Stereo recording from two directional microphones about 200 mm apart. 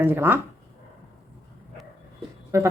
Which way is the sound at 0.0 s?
10° right (ahead or behind).